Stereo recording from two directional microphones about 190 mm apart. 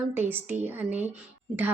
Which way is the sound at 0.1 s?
10° right (ahead or behind).